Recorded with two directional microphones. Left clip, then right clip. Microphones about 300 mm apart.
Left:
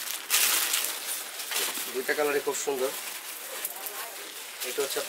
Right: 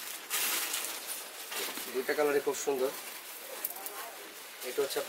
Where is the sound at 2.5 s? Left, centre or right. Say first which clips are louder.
Left 2 dB; right.